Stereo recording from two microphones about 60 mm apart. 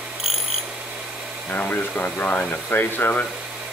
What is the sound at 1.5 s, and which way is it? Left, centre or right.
Speech, left.